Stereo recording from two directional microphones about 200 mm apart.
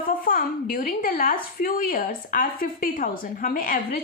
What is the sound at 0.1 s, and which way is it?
A woman's voice, 45° left (ahead or behind).